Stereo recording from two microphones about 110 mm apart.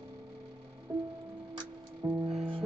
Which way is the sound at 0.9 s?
35° right (ahead or behind).